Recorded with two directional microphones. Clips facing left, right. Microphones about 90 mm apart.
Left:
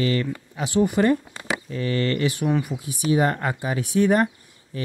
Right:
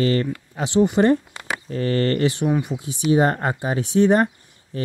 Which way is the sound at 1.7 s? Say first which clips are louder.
Right 4 dB; 45° right (ahead or behind).